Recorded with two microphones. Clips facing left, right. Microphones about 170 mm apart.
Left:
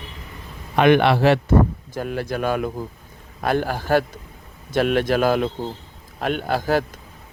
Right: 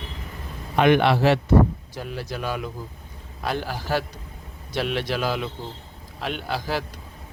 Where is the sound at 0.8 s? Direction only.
60° left (ahead or behind).